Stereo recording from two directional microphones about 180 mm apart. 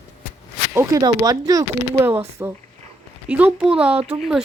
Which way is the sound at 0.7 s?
20° right (ahead or behind).